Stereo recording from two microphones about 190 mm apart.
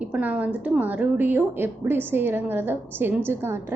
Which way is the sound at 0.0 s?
5° right (ahead or behind).